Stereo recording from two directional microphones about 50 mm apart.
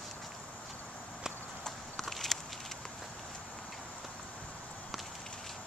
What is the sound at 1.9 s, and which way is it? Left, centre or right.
Walk, centre.